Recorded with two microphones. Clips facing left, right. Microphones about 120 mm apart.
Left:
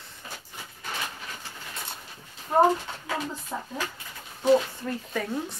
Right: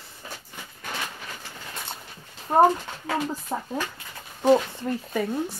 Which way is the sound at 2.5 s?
40° right (ahead or behind).